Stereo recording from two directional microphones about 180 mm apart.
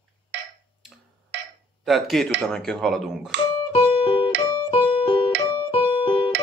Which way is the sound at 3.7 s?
30° left (ahead or behind).